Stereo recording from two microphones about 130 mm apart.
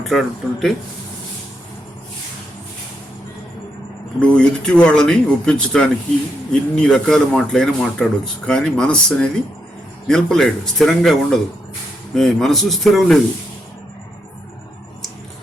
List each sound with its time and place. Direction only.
0.0 s speech: centre (ahead or behind)
4.2 s speech: 10° left (ahead or behind)